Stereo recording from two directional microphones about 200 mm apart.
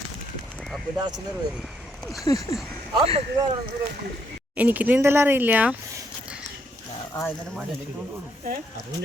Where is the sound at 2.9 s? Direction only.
25° right (ahead or behind).